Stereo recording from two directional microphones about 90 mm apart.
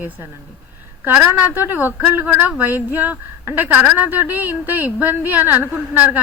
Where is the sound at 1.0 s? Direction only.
20° right (ahead or behind).